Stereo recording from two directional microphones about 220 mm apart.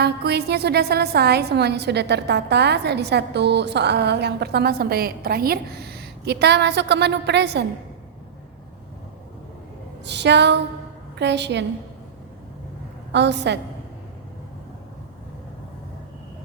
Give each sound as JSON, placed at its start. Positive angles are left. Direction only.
{"t": 0.0, "sound": "a woman's voice", "side_deg": -50}
{"t": 10.0, "sound": "a woman's voice", "side_deg": -50}
{"t": 13.1, "sound": "a woman's voice", "side_deg": -50}